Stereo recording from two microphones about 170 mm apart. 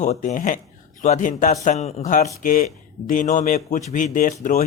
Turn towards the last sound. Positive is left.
turn(degrees=50)  # may be behind; listen again after turning